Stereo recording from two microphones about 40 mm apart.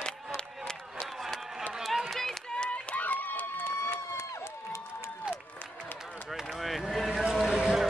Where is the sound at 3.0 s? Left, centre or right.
Left.